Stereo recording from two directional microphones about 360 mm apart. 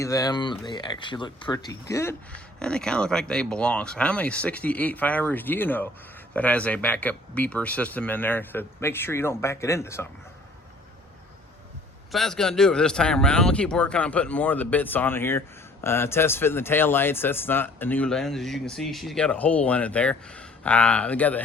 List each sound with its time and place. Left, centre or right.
0.0 s speech: centre
12.1 s speech: centre